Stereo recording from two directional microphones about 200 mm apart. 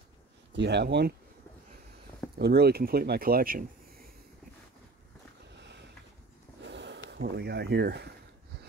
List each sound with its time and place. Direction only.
0.5 s speech: 60° right (ahead or behind)
2.3 s speech: 50° right (ahead or behind)
6.6 s sniff: 60° right (ahead or behind)